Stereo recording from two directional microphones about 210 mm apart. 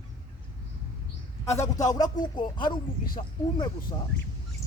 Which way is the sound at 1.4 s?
15° left (ahead or behind).